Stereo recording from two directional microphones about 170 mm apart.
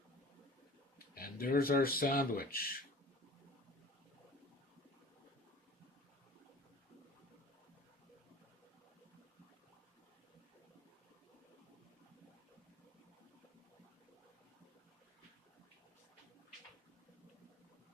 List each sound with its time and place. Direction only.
0.9 s speech: 60° left (ahead or behind)